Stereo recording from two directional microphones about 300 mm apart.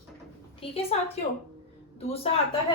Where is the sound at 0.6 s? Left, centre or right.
Centre.